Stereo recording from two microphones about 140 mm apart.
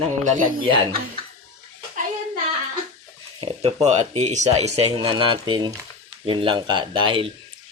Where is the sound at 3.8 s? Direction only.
50° right (ahead or behind).